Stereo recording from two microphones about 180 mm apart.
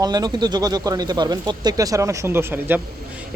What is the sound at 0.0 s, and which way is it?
Speech, 20° right (ahead or behind).